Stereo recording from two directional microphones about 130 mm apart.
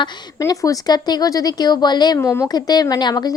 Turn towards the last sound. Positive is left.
turn(degrees=35)  # may be behind; listen again after turning